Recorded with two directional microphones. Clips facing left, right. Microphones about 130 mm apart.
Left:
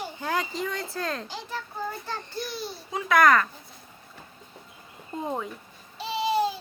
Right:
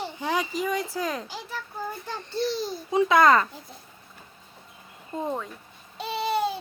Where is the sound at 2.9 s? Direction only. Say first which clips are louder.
Right 2 dB; 20° right (ahead or behind).